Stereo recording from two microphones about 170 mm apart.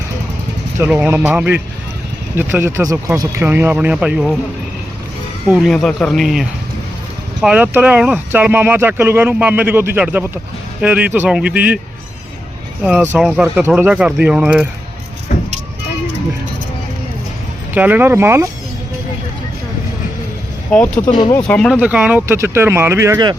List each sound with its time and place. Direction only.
0.8 s speech: 10° right (ahead or behind)
5.5 s speech: centre (ahead or behind)
12.8 s speech: 5° right (ahead or behind)
17.7 s speech: 10° right (ahead or behind)
20.7 s speech: 5° left (ahead or behind)
21.0 s speech: 25° left (ahead or behind)
21.4 s speech: 5° left (ahead or behind)
21.8 s speech: 5° right (ahead or behind)